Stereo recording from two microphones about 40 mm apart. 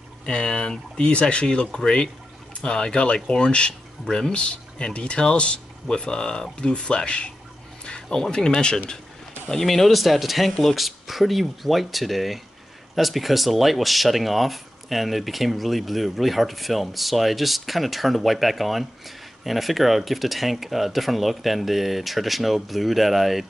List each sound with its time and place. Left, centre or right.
0.2 s speech: left
7.8 s music: left
8.2 s speech: centre
9.5 s speech: centre